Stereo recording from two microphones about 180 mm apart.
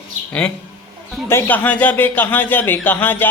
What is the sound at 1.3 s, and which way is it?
Speech, 10° left (ahead or behind).